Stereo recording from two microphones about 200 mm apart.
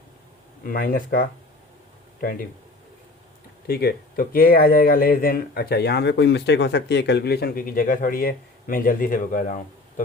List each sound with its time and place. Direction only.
0.6 s speech: 45° left (ahead or behind)
3.7 s speech: 50° left (ahead or behind)